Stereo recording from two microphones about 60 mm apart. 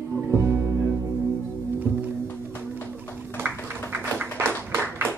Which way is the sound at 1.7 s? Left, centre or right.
Right.